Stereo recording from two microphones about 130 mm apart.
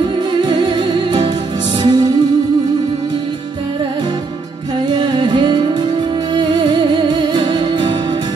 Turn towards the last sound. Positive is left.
turn(degrees=-35)  # may be behind; listen again after turning